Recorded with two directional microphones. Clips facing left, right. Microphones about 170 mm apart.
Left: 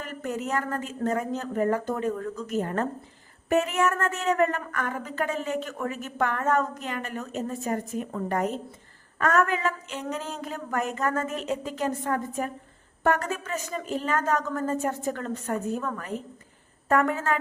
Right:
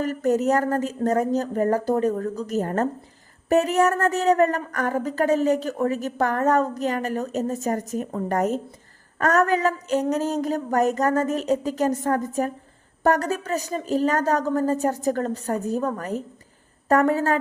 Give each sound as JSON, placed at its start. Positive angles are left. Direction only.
{"t": 0.0, "sound": "speech", "side_deg": -40}